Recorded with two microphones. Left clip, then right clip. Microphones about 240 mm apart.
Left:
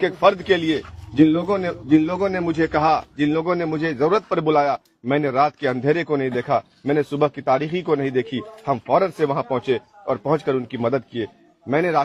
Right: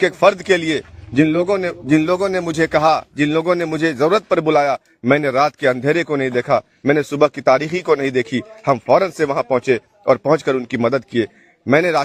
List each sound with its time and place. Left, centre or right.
0.0 s a man's voice: right